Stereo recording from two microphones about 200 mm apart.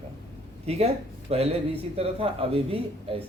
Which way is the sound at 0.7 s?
30° right (ahead or behind).